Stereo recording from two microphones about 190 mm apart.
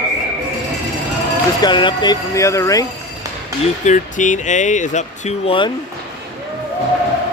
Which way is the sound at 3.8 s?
40° left (ahead or behind).